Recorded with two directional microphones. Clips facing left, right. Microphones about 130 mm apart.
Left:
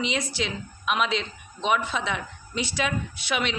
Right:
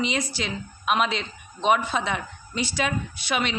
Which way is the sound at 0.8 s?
45° right (ahead or behind).